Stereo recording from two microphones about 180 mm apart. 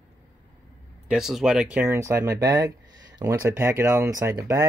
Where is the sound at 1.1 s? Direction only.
Centre (ahead or behind).